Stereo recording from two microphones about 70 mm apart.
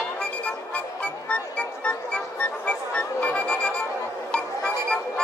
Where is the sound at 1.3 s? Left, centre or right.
Centre.